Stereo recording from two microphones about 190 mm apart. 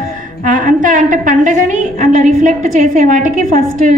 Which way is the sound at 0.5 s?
45° right (ahead or behind).